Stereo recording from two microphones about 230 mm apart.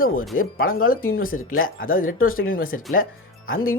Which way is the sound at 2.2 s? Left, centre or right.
Left.